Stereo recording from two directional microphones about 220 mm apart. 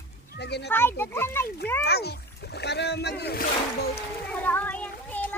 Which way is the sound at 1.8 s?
45° left (ahead or behind).